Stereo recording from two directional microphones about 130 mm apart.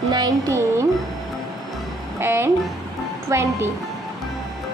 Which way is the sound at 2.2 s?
20° right (ahead or behind).